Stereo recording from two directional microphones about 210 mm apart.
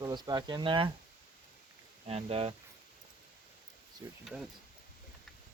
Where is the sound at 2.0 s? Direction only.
30° right (ahead or behind).